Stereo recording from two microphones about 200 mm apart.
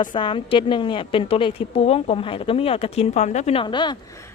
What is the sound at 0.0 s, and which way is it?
Speech, 25° left (ahead or behind).